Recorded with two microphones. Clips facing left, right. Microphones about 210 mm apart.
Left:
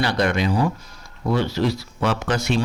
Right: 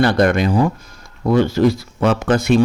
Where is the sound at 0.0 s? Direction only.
50° right (ahead or behind).